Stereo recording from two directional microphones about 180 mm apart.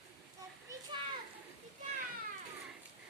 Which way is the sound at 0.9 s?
25° right (ahead or behind).